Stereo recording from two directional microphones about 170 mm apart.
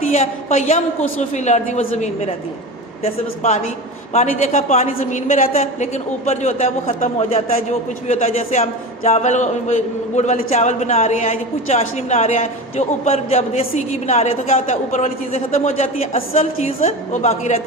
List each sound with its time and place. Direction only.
0.1 s a woman's voice: 40° left (ahead or behind)